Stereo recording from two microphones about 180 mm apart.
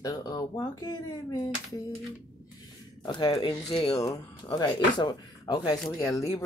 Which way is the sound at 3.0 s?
25° left (ahead or behind).